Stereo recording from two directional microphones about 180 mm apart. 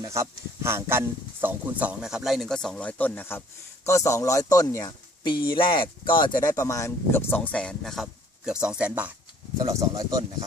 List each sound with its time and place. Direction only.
0.0 s speech: 15° right (ahead or behind)
9.6 s speech: 20° right (ahead or behind)